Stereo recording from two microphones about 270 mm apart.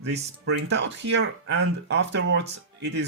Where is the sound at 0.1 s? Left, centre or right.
Right.